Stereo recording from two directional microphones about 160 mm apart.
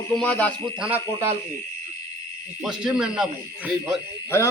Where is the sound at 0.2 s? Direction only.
10° left (ahead or behind).